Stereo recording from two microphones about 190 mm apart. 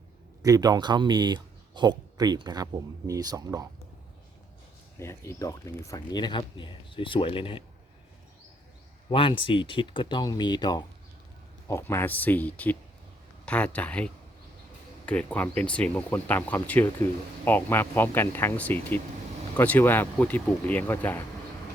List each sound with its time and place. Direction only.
0.4 s speech: 20° right (ahead or behind)
4.9 s speech: 15° left (ahead or behind)
9.0 s speech: 25° left (ahead or behind); by 21.2 s 10° left (ahead or behind)